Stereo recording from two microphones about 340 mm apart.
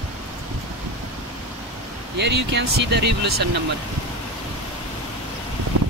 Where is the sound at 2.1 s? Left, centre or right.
Right.